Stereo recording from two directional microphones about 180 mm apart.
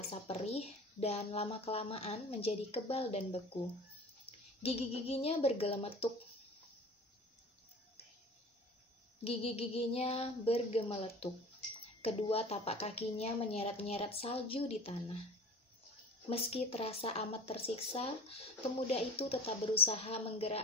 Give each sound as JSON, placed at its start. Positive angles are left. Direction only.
{"t": 0.1, "sound": "speech", "side_deg": 35}
{"t": 4.6, "sound": "speech", "side_deg": 35}
{"t": 9.2, "sound": "speech", "side_deg": 35}
{"t": 16.3, "sound": "speech", "side_deg": 35}